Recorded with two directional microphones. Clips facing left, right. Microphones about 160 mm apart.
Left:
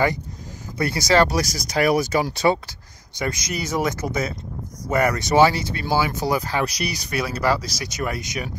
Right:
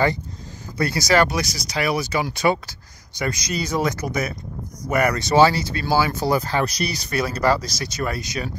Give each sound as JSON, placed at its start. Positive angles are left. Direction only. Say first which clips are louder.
{"t": 0.7, "sound": "speech", "louder": "even", "side_deg": 25}
{"t": 1.3, "sound": "speech", "louder": "left 2 dB", "side_deg": 45}